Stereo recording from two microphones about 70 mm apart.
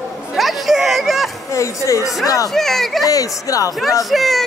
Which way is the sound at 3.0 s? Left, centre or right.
Left.